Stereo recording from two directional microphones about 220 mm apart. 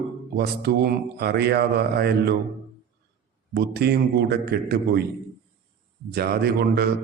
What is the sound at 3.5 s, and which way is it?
Speech, 45° right (ahead or behind).